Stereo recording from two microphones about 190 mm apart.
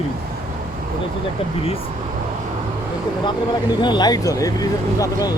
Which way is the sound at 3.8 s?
20° left (ahead or behind).